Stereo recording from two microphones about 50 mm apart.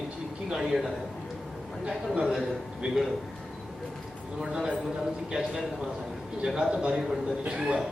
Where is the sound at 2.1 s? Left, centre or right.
Centre.